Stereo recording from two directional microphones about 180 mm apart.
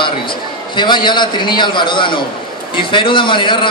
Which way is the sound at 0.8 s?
25° left (ahead or behind).